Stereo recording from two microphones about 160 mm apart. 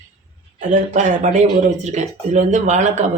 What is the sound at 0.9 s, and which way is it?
Speech, 50° right (ahead or behind).